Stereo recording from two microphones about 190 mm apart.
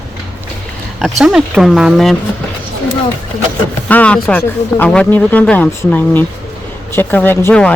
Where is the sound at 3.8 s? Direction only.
5° left (ahead or behind).